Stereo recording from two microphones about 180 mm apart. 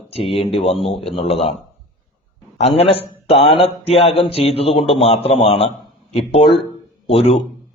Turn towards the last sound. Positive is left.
turn(degrees=30)  # may be behind; listen again after turning